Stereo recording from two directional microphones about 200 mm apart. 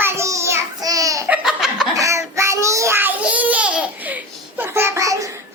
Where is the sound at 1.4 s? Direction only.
Centre (ahead or behind).